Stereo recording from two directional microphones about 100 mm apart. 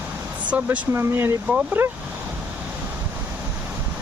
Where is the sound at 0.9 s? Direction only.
25° right (ahead or behind).